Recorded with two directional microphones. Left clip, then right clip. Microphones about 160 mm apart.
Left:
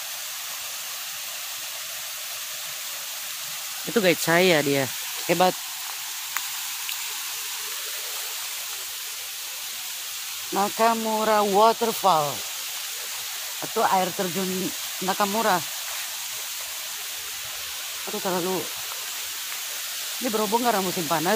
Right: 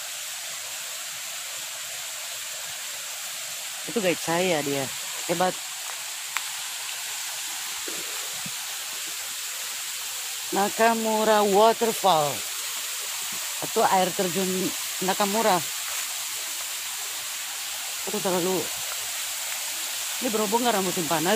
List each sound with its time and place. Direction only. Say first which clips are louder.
4.0 s speech: left 5 dB; 50° left (ahead or behind)
10.5 s speech: even; 5° right (ahead or behind)
13.7 s speech: right 1 dB; centre (ahead or behind)
18.2 s speech: right 1 dB; 5° left (ahead or behind)
20.3 s speech: left 1 dB; 20° left (ahead or behind)